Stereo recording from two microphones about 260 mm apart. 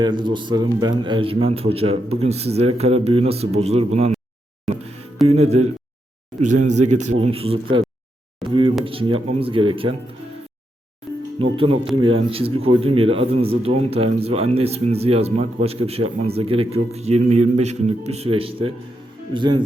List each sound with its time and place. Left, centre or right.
0.0 s speech: centre
4.7 s music: centre
5.3 s speech: right
8.4 s speech: centre
8.8 s speech: right
11.3 s speech: right